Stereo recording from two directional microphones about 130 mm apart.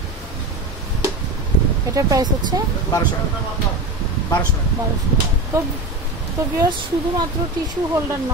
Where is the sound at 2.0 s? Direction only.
25° right (ahead or behind).